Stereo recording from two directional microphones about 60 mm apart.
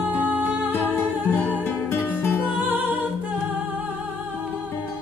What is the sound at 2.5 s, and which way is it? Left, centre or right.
Music, right.